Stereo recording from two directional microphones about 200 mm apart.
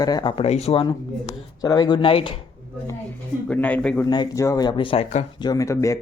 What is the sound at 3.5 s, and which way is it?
Speech, 5° left (ahead or behind).